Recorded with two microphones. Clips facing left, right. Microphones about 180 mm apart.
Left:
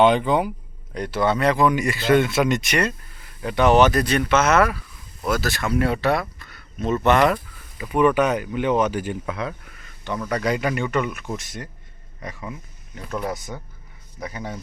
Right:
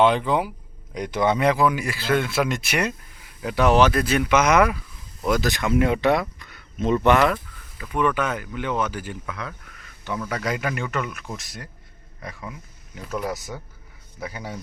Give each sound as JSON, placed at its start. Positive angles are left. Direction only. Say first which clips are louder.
{"t": 0.0, "sound": "speech", "louder": "left 2 dB", "side_deg": 0}
{"t": 0.9, "sound": "speech", "louder": "even", "side_deg": -15}
{"t": 1.5, "sound": "speech", "louder": "left 2 dB", "side_deg": -5}
{"t": 7.8, "sound": "speech", "louder": "left 5 dB", "side_deg": 15}
{"t": 10.0, "sound": "speech", "louder": "left 3 dB", "side_deg": -5}